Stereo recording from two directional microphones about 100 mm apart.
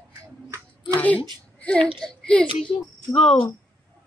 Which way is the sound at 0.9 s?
15° left (ahead or behind).